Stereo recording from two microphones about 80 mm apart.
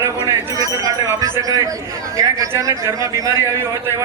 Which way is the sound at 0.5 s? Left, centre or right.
Right.